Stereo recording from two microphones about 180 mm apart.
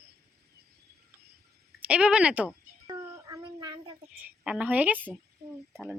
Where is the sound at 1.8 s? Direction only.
5° right (ahead or behind).